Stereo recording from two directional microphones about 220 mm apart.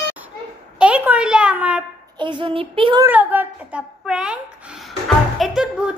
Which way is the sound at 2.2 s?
20° right (ahead or behind).